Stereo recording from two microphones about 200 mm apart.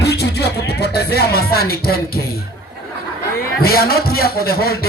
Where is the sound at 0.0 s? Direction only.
55° left (ahead or behind).